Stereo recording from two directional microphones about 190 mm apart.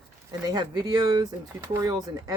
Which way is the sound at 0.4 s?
20° right (ahead or behind).